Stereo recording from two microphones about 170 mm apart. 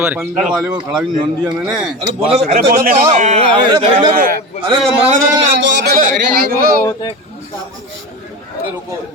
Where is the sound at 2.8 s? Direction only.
50° right (ahead or behind).